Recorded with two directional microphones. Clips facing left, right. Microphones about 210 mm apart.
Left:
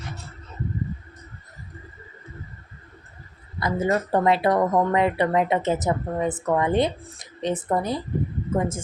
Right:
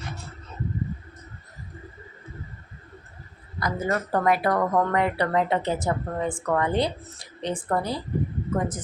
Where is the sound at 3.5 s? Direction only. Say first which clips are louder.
Left 4 dB; 25° left (ahead or behind).